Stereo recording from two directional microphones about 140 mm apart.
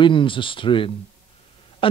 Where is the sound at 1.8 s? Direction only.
40° left (ahead or behind).